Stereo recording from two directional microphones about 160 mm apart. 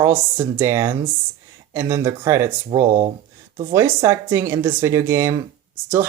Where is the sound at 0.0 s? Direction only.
15° right (ahead or behind).